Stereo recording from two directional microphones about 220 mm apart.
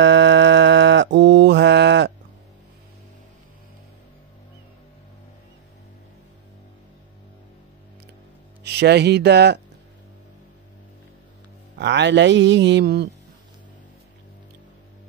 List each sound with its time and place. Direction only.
0.0 s mantra: 55° right (ahead or behind)
8.6 s speech: 50° right (ahead or behind)
11.8 s speech: 50° right (ahead or behind)